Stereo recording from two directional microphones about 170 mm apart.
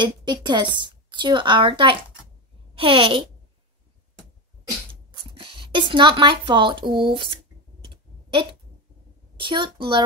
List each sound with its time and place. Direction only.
0.0 s a woman's voice: 25° right (ahead or behind)
5.4 s a woman's voice: 30° right (ahead or behind)
7.9 s clicking: 30° right (ahead or behind)
9.4 s a woman's voice: 30° right (ahead or behind)